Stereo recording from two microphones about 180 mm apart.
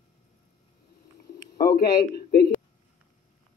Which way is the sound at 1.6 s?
60° left (ahead or behind).